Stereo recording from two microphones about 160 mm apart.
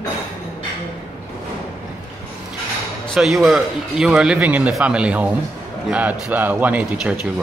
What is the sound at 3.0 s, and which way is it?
Speech, centre (ahead or behind).